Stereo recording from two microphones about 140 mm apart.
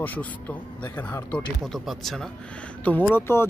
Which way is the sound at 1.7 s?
Centre (ahead or behind).